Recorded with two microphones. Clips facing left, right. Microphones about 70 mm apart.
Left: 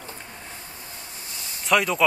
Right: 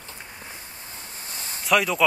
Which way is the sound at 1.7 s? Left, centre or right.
Centre.